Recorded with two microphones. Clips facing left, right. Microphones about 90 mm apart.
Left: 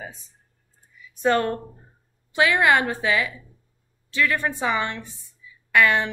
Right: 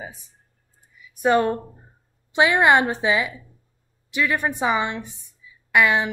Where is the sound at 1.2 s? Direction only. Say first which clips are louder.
Right 2 dB; 15° right (ahead or behind).